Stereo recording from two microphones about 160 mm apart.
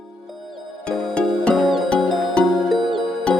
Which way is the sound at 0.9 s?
5° left (ahead or behind).